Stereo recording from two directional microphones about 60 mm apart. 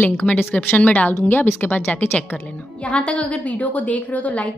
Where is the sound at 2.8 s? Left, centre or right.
Centre.